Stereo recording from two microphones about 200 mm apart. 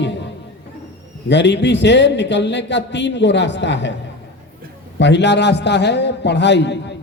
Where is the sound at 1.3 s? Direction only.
60° left (ahead or behind).